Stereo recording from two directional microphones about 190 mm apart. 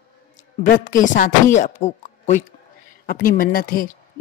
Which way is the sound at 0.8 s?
45° left (ahead or behind).